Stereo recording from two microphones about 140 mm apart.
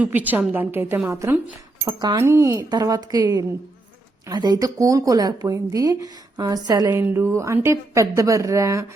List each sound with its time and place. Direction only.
0.0 s a woman's voice: 10° right (ahead or behind)
1.8 s speech: 30° right (ahead or behind)
2.1 s speech: 20° right (ahead or behind)
7.0 s speech: 15° right (ahead or behind)